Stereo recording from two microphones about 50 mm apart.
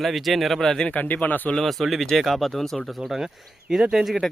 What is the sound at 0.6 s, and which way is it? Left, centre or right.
Speech, centre.